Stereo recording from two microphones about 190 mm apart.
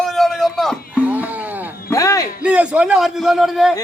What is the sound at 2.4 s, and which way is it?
A man's voice, 5° right (ahead or behind).